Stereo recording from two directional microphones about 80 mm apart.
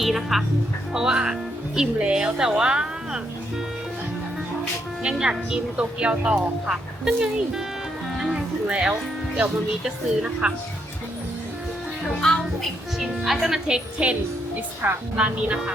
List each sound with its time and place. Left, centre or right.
0.0 s speech: centre
5.1 s speech: centre
8.1 s music: centre
9.8 s speech: centre
13.0 s speech: centre
14.8 s a woman's voice: right
15.2 s speech: centre